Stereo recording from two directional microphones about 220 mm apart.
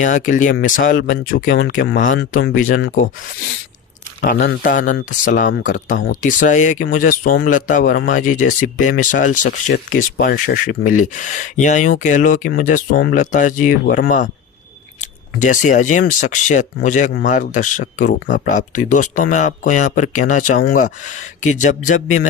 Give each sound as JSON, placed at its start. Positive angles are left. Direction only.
{"t": 0.0, "sound": "speech", "side_deg": 35}
{"t": 4.2, "sound": "speech", "side_deg": 40}